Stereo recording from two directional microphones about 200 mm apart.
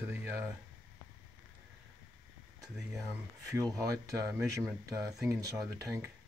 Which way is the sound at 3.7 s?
15° right (ahead or behind).